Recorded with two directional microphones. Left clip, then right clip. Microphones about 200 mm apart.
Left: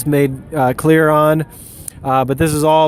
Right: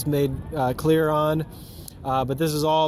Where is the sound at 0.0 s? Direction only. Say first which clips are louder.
Left 9 dB; 45° left (ahead or behind).